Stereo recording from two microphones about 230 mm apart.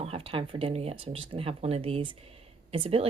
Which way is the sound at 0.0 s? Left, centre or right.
Right.